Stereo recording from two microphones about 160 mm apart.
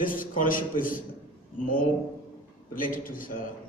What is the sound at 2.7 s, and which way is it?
Speech, 60° left (ahead or behind).